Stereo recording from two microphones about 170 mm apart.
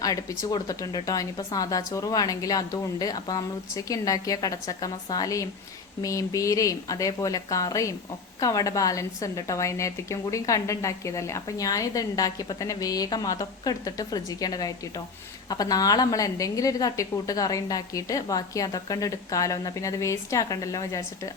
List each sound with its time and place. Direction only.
0.0 s a woman's voice: 20° left (ahead or behind)